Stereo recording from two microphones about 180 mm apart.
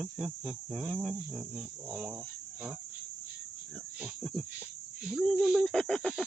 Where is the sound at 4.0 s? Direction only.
Centre (ahead or behind).